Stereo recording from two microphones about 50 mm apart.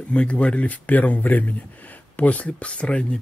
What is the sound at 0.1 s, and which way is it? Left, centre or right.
Speech, left.